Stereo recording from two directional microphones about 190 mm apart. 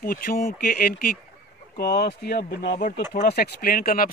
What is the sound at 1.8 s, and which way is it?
Speech, 60° left (ahead or behind).